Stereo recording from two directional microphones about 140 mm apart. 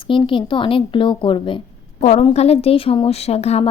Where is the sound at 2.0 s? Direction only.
50° left (ahead or behind).